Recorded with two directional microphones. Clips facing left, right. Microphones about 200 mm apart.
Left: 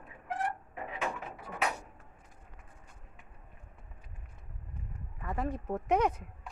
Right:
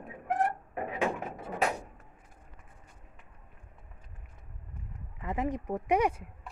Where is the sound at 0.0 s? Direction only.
55° right (ahead or behind).